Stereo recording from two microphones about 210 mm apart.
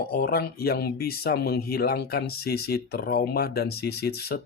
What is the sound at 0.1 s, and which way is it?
Speech, 45° left (ahead or behind).